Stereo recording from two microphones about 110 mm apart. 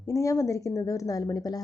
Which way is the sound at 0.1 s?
30° left (ahead or behind).